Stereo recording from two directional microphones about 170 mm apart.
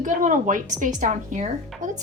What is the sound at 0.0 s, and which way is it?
A woman's voice, 50° right (ahead or behind).